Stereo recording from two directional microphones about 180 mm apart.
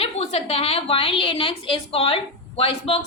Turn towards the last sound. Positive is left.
turn(degrees=30)  # may be behind; listen again after turning